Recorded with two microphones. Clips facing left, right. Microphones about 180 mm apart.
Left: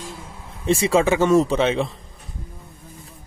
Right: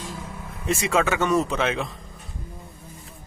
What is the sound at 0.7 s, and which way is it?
Speech, 30° left (ahead or behind).